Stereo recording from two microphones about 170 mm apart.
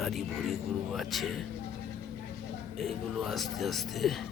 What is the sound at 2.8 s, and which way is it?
Speech, centre (ahead or behind).